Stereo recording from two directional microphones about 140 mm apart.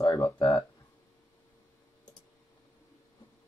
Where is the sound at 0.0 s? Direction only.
25° left (ahead or behind).